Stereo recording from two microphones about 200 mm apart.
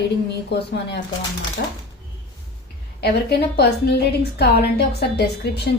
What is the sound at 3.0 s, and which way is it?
A woman's voice, 55° left (ahead or behind).